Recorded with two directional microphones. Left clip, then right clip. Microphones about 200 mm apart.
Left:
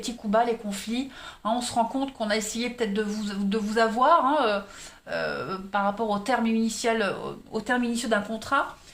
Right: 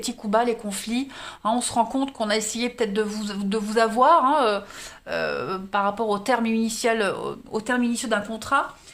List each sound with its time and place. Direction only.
0.0 s speech: 40° right (ahead or behind)